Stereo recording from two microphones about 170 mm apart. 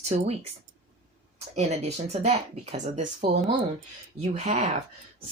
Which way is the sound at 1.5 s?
40° right (ahead or behind).